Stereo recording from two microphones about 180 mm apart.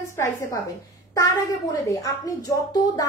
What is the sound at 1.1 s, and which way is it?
Speech, 20° left (ahead or behind).